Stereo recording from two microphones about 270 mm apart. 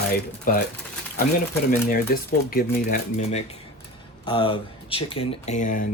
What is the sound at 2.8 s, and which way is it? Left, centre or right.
Speech, left.